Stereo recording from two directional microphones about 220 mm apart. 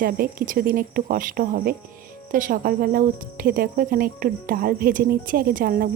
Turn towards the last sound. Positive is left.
turn(degrees=-40)  # may be behind; listen again after turning